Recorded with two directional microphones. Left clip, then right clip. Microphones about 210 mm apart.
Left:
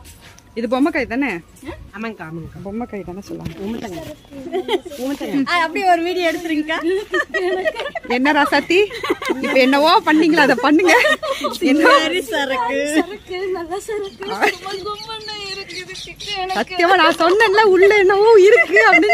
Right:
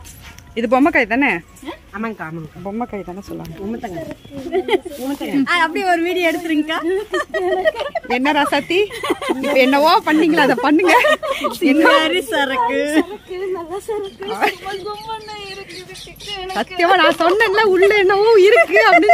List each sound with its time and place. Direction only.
0.6 s a woman's voice: 5° right (ahead or behind)
2.6 s a woman's voice: centre (ahead or behind)
4.5 s a woman's voice: 40° right (ahead or behind)
8.1 s a woman's voice: 5° left (ahead or behind)
8.9 s speech: 55° right (ahead or behind)
9.6 s a woman's voice: 5° left (ahead or behind)
12.0 s a woman's voice: 30° right (ahead or behind)
13.0 s a woman's voice: 5° right (ahead or behind)
14.2 s a woman's voice: 10° left (ahead or behind)
14.9 s a woman's voice: 10° right (ahead or behind)
16.5 s a woman's voice: 5° left (ahead or behind)